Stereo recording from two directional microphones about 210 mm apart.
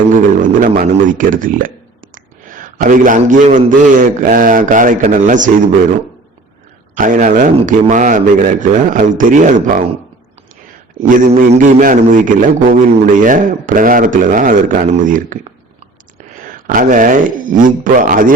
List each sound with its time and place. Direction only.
0.1 s a man's voice: 40° right (ahead or behind)
6.9 s speech: 40° right (ahead or behind)
11.0 s speech: 40° right (ahead or behind)
16.3 s a sound: 40° right (ahead or behind)
17.6 s speech: 40° right (ahead or behind)